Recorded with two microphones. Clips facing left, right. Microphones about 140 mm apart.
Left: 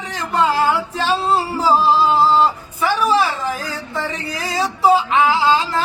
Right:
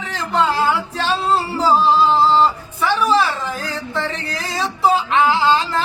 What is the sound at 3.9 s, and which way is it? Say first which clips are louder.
Music: even; 10° left (ahead or behind).